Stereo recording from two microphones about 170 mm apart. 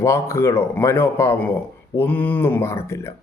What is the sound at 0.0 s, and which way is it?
Speech, 15° left (ahead or behind).